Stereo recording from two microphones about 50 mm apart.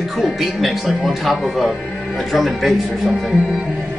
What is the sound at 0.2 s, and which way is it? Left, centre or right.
Speech, centre.